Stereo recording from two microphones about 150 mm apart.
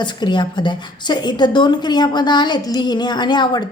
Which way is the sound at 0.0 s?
30° left (ahead or behind).